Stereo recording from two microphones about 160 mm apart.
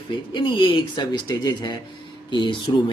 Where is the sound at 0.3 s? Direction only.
30° left (ahead or behind).